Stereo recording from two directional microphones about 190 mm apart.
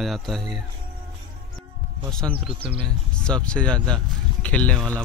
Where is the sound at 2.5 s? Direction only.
30° right (ahead or behind).